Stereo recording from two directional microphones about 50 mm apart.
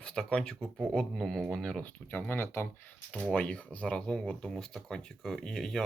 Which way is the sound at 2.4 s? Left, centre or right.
Left.